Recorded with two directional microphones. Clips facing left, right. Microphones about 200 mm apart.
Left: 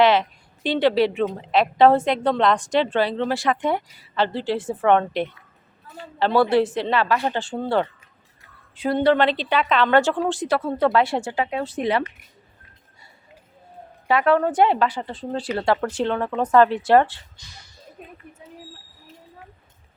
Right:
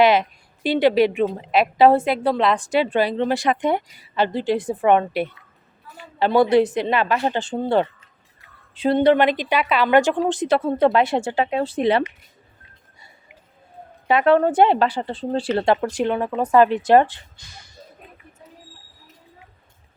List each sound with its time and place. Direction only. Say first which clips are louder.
0.0 s a woman's voice: right 1 dB; 10° right (ahead or behind); by 12.0 s 30° right (ahead or behind)
14.1 s speech: right 3 dB; 25° right (ahead or behind)